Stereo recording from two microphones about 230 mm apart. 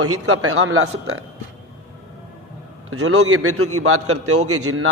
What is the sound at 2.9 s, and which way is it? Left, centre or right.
A man's voice, right.